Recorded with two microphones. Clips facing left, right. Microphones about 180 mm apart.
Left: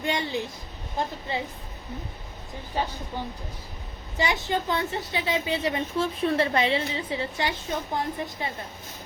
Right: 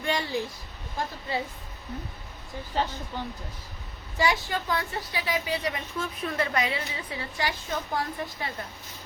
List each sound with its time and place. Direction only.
0.0 s a woman's voice: 20° left (ahead or behind)
2.8 s a woman's voice: 15° left (ahead or behind)